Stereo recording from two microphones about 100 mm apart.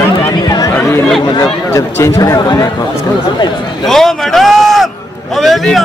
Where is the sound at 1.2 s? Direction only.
40° left (ahead or behind).